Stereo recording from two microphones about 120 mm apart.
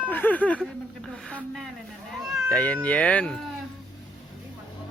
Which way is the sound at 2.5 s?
10° left (ahead or behind).